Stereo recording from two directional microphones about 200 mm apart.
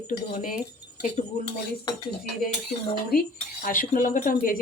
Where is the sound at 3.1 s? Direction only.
50° left (ahead or behind).